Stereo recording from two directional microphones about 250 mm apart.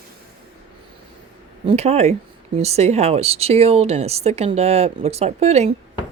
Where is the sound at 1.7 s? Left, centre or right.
Right.